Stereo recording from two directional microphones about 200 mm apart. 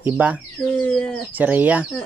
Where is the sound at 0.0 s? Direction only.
10° right (ahead or behind).